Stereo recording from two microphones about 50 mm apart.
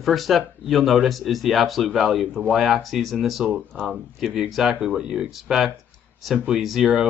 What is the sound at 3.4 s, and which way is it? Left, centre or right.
Speech, centre.